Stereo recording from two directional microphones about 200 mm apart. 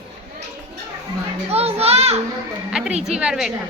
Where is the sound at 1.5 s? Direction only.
30° right (ahead or behind).